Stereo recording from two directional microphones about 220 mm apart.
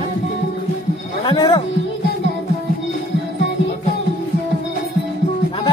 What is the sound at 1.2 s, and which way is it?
Speech, 20° left (ahead or behind).